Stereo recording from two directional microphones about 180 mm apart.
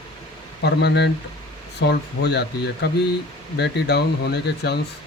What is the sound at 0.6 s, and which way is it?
Speech, 70° left (ahead or behind).